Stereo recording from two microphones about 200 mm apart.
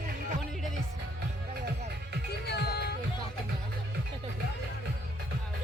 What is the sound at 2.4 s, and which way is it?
Music, 55° left (ahead or behind).